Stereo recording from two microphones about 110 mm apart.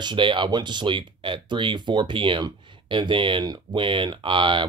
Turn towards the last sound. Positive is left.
turn(degrees=-50)  # may be behind; listen again after turning